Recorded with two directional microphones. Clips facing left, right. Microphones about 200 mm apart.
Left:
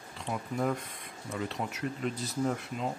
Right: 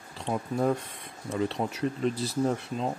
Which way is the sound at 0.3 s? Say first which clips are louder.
Right 5 dB; 30° right (ahead or behind).